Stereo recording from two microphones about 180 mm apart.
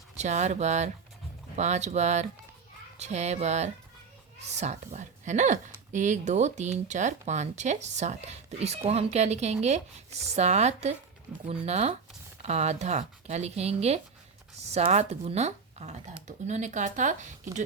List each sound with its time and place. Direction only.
0.2 s a woman's voice: 40° right (ahead or behind)